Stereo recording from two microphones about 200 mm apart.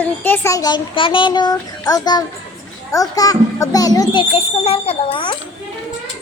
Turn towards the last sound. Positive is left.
turn(degrees=25)  # may be behind; listen again after turning